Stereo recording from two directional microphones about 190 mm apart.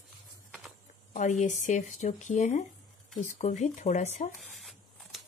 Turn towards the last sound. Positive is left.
turn(degrees=0)  # may be behind; listen again after turning